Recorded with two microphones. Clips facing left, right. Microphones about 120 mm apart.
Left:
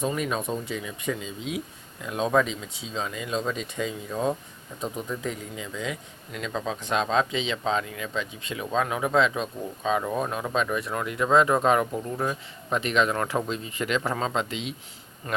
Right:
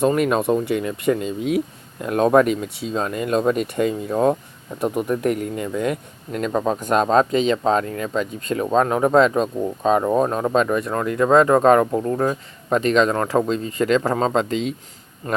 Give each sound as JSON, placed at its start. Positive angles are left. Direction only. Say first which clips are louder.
{"t": 0.0, "sound": "speech", "louder": "right 10 dB", "side_deg": -60}